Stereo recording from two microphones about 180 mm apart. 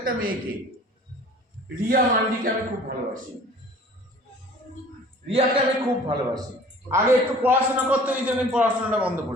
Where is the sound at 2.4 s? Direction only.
50° right (ahead or behind).